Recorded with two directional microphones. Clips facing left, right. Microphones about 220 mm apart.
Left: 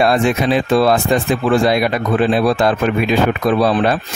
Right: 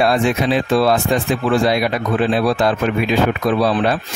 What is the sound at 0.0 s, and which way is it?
Speech, 50° left (ahead or behind).